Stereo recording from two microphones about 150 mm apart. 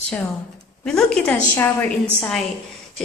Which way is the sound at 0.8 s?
5° left (ahead or behind).